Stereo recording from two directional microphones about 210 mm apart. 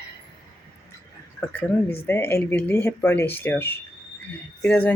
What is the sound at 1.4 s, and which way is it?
Speech, 10° left (ahead or behind).